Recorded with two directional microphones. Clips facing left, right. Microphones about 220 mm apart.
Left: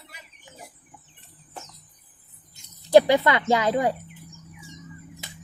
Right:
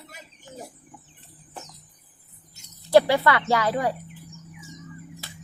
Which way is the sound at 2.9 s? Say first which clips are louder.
Left 2 dB; 20° left (ahead or behind).